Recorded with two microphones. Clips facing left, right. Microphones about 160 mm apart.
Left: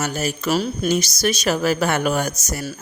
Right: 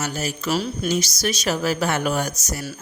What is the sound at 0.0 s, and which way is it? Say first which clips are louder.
Speech: left 3 dB; 55° left (ahead or behind).